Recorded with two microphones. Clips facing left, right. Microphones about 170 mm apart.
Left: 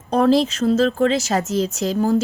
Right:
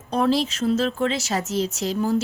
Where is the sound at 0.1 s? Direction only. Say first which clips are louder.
Left 5 dB; 40° left (ahead or behind).